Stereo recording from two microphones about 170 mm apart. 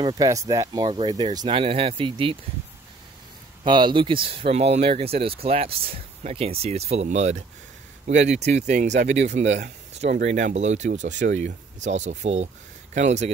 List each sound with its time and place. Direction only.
0.0 s speech: 20° right (ahead or behind)
3.6 s speech: 25° right (ahead or behind); by 13.3 s 45° right (ahead or behind)